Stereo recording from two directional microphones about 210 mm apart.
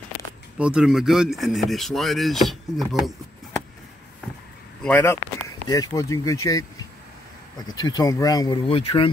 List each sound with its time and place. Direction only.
0.6 s speech: 5° right (ahead or behind)
4.8 s speech: 10° left (ahead or behind)
7.6 s speech: 20° left (ahead or behind)